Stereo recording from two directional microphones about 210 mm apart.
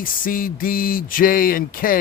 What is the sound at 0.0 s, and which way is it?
Speech, 40° left (ahead or behind).